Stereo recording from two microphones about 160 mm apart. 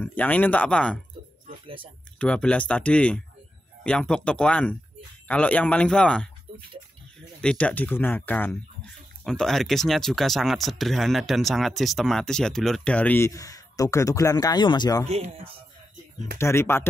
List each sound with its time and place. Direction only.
0.0 s speech: 10° left (ahead or behind)
2.1 s speech: 5° left (ahead or behind)
7.4 s speech: 10° left (ahead or behind); by 15.0 s 25° left (ahead or behind)
16.3 s speech: 15° left (ahead or behind)